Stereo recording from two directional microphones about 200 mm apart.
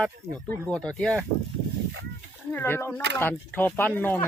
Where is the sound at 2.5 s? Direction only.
10° left (ahead or behind).